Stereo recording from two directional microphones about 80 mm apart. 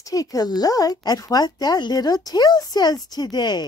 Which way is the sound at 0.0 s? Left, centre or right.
Left.